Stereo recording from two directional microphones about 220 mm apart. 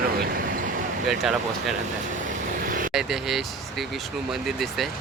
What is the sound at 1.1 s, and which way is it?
Speech, centre (ahead or behind).